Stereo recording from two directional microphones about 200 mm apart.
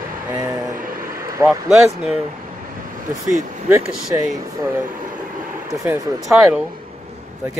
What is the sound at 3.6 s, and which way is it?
Speech, 10° right (ahead or behind).